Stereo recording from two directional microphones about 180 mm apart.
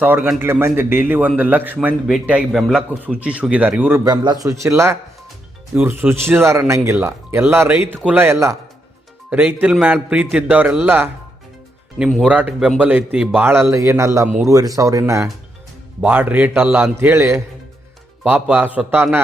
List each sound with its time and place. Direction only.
0.0 s a man's voice: 5° right (ahead or behind)